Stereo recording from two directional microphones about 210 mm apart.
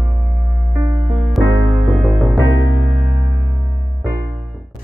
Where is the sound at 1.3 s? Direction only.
Centre (ahead or behind).